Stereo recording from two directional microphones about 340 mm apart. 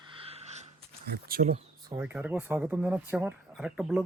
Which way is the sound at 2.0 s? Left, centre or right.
Centre.